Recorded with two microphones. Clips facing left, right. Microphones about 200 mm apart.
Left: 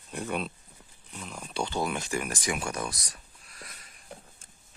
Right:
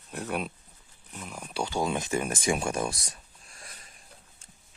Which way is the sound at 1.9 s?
20° right (ahead or behind).